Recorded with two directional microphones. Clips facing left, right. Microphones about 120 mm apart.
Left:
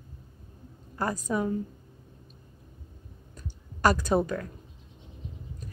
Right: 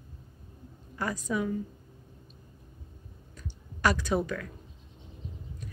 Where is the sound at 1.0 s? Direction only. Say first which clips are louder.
Left 2 dB; 40° left (ahead or behind).